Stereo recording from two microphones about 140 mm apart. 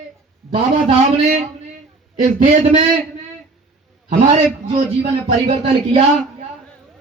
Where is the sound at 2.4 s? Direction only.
60° right (ahead or behind).